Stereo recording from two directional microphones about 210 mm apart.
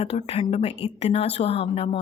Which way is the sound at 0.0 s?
30° left (ahead or behind).